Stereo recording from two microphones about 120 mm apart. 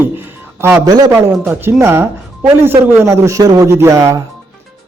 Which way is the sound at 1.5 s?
15° right (ahead or behind).